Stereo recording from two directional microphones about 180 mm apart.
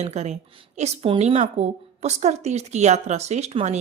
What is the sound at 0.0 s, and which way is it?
A woman's voice, 40° right (ahead or behind).